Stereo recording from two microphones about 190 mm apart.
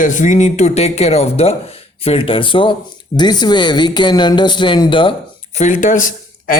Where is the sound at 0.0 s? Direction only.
40° left (ahead or behind); by 5.1 s 25° left (ahead or behind).